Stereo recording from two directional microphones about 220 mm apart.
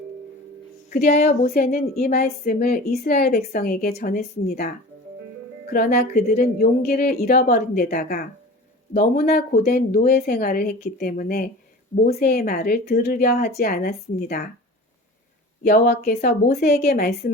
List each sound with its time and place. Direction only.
1.0 s a woman's voice: 30° left (ahead or behind)
1.5 s speech: 40° left (ahead or behind)
5.7 s speech: 45° left (ahead or behind)
15.6 s speech: 45° left (ahead or behind)